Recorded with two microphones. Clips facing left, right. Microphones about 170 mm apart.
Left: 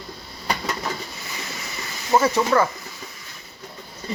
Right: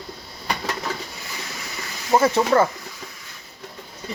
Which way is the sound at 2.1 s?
30° right (ahead or behind).